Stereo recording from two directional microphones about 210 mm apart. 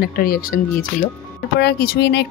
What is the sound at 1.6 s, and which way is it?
Speech, 50° left (ahead or behind).